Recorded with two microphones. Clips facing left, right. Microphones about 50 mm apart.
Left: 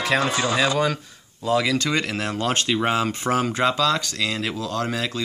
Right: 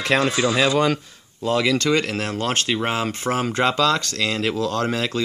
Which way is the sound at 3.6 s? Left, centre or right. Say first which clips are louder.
Right 4 dB; right.